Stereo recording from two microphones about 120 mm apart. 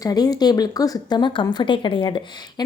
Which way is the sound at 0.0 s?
30° left (ahead or behind).